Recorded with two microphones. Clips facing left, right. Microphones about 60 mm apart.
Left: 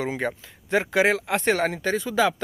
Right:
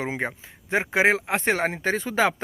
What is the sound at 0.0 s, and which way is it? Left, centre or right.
Speech, right.